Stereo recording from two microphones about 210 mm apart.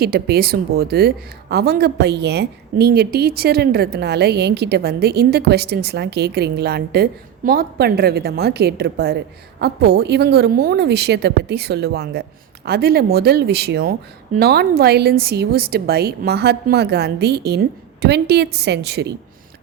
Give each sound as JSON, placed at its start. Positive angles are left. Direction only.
{"t": 0.0, "sound": "speech", "side_deg": -45}